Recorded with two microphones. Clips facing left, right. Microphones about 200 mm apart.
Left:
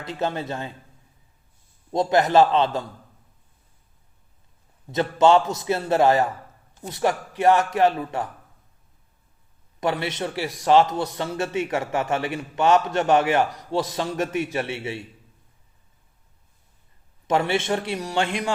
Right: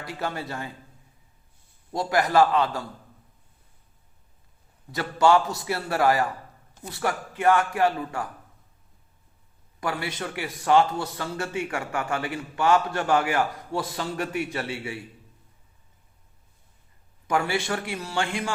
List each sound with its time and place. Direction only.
0.0 s a man's voice: 20° left (ahead or behind)
1.9 s a man's voice: 20° left (ahead or behind)
4.9 s a man's voice: 20° left (ahead or behind)
9.8 s a man's voice: 20° left (ahead or behind)
17.2 s a man's voice: 25° left (ahead or behind)